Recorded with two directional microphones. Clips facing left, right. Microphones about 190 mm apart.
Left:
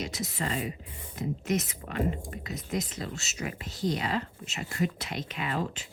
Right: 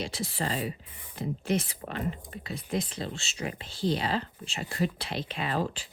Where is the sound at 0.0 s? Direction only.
30° right (ahead or behind).